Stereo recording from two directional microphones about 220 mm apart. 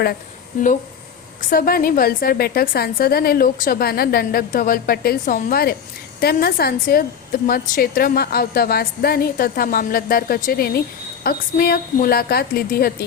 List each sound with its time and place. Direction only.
1.4 s a woman's voice: 40° left (ahead or behind)